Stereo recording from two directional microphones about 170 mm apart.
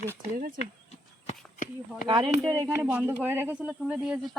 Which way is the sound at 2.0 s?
25° right (ahead or behind).